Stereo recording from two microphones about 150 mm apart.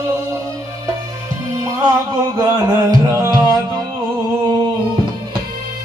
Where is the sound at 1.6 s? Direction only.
25° right (ahead or behind).